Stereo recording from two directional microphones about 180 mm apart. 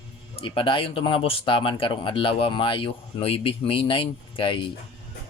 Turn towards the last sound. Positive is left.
turn(degrees=30)  # may be behind; listen again after turning